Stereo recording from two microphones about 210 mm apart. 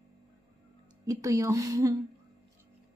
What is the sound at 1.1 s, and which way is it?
Speech, 15° right (ahead or behind).